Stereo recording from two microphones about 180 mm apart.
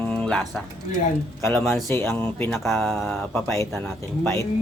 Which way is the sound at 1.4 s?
15° left (ahead or behind).